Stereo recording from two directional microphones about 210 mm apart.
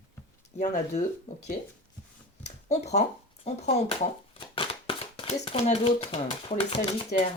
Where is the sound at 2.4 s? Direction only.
30° left (ahead or behind).